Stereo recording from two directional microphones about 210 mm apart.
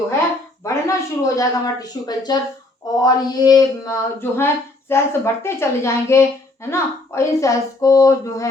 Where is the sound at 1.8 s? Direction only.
20° left (ahead or behind).